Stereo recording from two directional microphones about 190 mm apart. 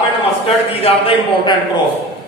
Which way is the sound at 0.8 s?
30° left (ahead or behind).